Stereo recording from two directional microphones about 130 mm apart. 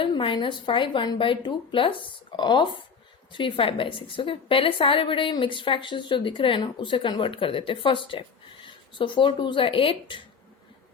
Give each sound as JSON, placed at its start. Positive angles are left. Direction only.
{"t": 0.0, "sound": "a woman's voice", "side_deg": 40}